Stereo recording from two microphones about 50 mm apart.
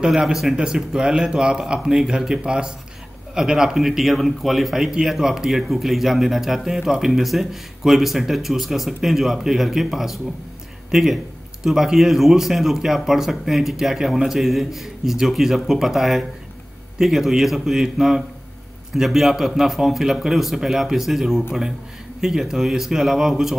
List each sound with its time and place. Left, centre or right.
0.0 s a man's voice: centre